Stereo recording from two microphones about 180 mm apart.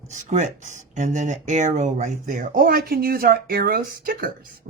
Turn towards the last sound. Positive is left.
turn(degrees=-55)  # may be behind; listen again after turning